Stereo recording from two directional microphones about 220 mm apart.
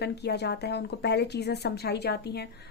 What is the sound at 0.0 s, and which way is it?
Speech, 50° left (ahead or behind).